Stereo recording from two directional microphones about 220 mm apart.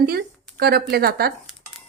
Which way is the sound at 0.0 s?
45° right (ahead or behind).